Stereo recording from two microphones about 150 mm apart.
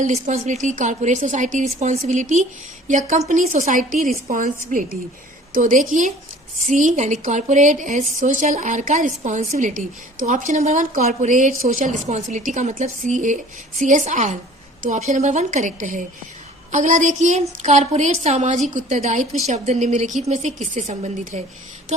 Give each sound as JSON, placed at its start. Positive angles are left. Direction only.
{"t": 0.0, "sound": "a woman's voice", "side_deg": -50}